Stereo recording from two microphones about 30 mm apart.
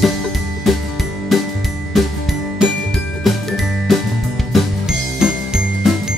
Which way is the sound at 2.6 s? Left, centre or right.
Right.